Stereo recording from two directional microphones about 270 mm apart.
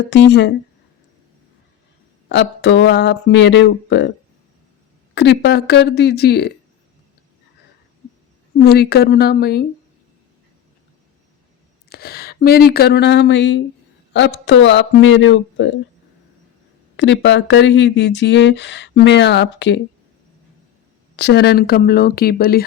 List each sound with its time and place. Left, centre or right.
0.1 s speech: left
2.3 s speech: left
5.1 s speech: left
8.6 s speech: left
11.9 s speech: left
17.0 s speech: left
21.2 s speech: left